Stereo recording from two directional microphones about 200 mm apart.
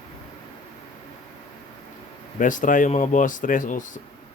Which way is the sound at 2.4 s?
40° left (ahead or behind).